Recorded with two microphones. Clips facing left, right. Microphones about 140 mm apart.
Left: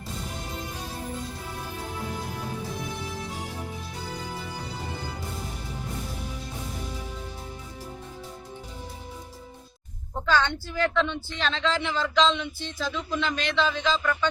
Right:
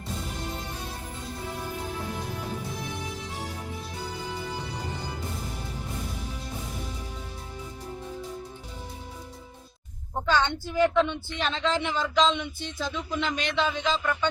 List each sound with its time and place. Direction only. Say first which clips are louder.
10.4 s speech: right 3 dB; 15° right (ahead or behind)